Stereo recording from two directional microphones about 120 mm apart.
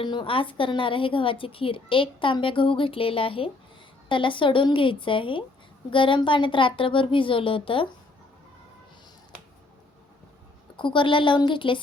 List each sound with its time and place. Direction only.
0.0 s a woman's voice: 40° left (ahead or behind)
10.8 s a woman's voice: 45° left (ahead or behind)